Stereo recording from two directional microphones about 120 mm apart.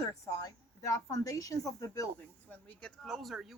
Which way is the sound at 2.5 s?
10° left (ahead or behind).